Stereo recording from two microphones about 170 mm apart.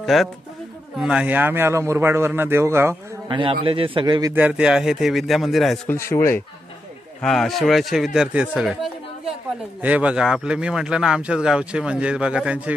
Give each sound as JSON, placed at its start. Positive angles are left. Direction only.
{"t": 0.0, "sound": "a man's voice", "side_deg": 0}
{"t": 3.3, "sound": "a man's voice", "side_deg": -30}
{"t": 4.4, "sound": "speech", "side_deg": -5}
{"t": 5.9, "sound": "speech", "side_deg": 15}
{"t": 7.2, "sound": "speech", "side_deg": 0}